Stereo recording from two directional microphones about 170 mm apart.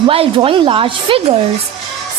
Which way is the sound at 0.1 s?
35° right (ahead or behind).